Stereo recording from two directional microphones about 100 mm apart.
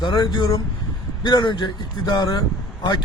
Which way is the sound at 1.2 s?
50° left (ahead or behind).